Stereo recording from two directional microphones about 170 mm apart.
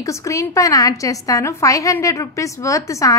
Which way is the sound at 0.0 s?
20° left (ahead or behind).